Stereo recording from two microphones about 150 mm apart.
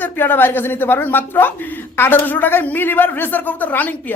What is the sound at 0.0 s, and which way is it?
A man's voice, 15° left (ahead or behind).